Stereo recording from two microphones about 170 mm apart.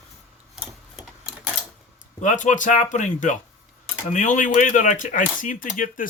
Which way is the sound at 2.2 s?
45° left (ahead or behind).